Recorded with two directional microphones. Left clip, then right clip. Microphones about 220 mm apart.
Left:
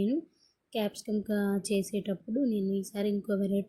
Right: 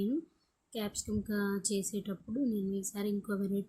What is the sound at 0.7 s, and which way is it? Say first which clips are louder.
A woman's voice: left 6 dB; 10° left (ahead or behind).